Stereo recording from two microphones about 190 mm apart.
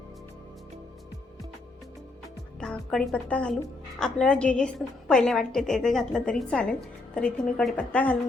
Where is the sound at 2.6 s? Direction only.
5° left (ahead or behind).